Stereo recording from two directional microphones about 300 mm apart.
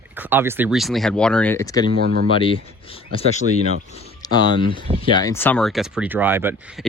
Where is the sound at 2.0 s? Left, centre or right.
Right.